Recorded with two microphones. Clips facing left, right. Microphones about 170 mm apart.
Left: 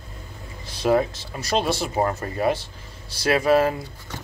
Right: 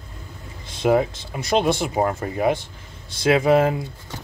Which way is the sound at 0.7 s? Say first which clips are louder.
Right 1 dB; 20° right (ahead or behind).